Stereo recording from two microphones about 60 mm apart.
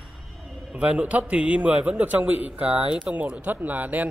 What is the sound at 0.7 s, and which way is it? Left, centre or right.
A man's voice, centre.